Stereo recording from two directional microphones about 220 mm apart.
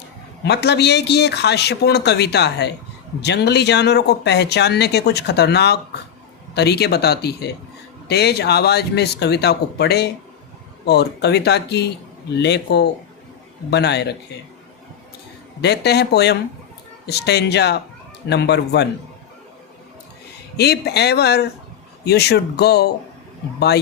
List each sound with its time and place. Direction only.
0.4 s speech: 50° left (ahead or behind)
15.6 s speech: 50° left (ahead or behind)
20.6 s speech: 50° left (ahead or behind)